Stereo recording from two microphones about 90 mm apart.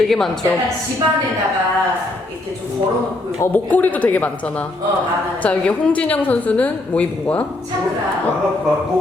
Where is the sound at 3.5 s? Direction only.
20° left (ahead or behind).